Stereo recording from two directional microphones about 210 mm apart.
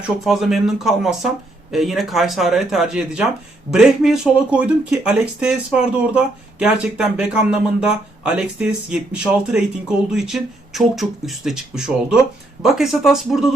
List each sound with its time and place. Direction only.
0.3 s speech: centre (ahead or behind)